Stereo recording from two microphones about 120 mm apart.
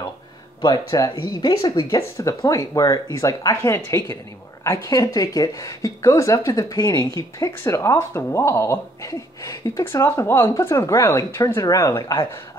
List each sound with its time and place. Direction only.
0.8 s speech: 30° left (ahead or behind)
2.0 s speech: 25° left (ahead or behind)